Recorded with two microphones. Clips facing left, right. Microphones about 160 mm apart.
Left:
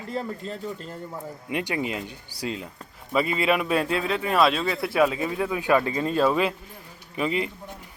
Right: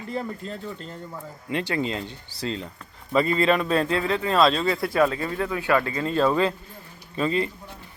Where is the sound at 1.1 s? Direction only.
15° left (ahead or behind).